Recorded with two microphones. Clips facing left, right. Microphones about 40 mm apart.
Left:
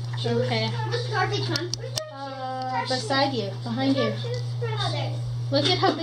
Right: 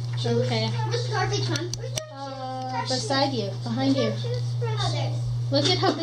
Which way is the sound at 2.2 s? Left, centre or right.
Centre.